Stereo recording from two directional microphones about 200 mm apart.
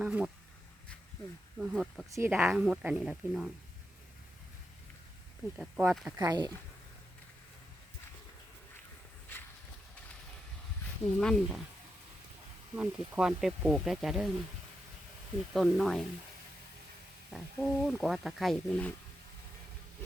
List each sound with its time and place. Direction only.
0.0 s speech: 5° right (ahead or behind)
1.5 s speech: centre (ahead or behind)
2.0 s speech: 15° right (ahead or behind)
5.5 s speech: 5° right (ahead or behind)
6.1 s speech: 20° right (ahead or behind)
11.2 s speech: centre (ahead or behind)
12.7 s speech: 5° right (ahead or behind)
15.5 s speech: centre (ahead or behind)
17.3 s speech: centre (ahead or behind)